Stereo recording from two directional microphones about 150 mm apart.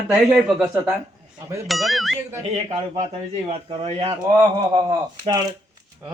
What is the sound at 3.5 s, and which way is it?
Speech, 40° right (ahead or behind).